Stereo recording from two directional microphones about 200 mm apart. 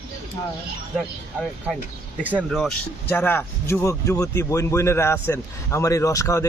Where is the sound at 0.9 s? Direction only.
Centre (ahead or behind).